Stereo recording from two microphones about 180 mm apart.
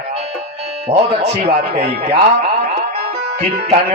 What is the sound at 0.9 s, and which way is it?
Speech, 35° right (ahead or behind).